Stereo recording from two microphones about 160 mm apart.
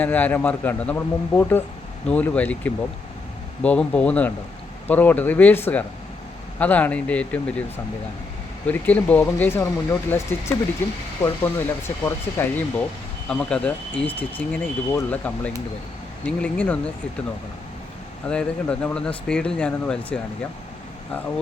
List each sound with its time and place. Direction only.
0.0 s speech: 10° left (ahead or behind)
8.6 s speech: 10° left (ahead or behind)
18.3 s speech: 5° left (ahead or behind)